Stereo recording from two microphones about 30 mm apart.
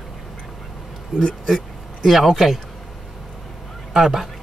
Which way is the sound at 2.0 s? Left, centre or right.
Centre.